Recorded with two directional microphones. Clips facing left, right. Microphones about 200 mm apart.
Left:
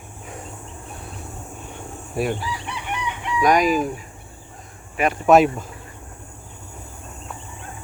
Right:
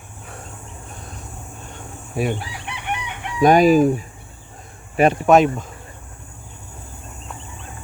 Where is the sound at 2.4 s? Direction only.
60° right (ahead or behind).